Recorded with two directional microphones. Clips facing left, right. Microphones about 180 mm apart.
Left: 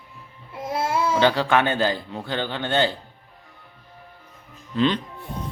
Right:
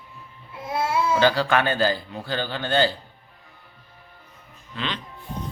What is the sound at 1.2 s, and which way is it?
A man's voice, 20° left (ahead or behind).